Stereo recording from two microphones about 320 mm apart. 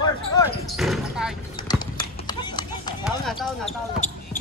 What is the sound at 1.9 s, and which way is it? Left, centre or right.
Clip-clop, centre.